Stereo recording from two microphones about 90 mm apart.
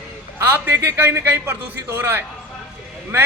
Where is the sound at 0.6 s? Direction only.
25° right (ahead or behind).